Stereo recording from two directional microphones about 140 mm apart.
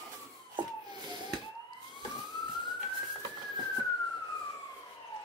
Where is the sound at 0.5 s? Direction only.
30° right (ahead or behind).